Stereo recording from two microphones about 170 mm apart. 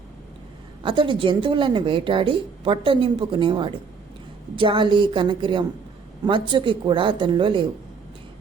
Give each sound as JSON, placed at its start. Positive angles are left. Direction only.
{"t": 0.8, "sound": "a woman's voice", "side_deg": -30}